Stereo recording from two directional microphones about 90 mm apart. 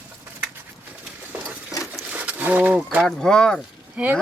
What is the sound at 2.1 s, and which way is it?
Speech, 15° right (ahead or behind).